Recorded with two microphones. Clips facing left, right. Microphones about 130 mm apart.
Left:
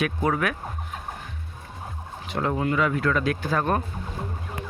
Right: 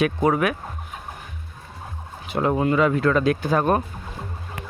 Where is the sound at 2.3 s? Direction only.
20° right (ahead or behind).